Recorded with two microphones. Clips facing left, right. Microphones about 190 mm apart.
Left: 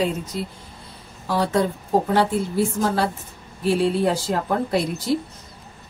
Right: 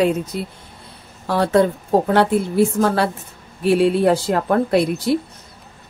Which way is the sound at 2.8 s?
65° right (ahead or behind).